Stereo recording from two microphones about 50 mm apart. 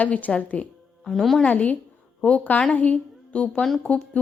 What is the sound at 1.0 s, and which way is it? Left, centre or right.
Speech, centre.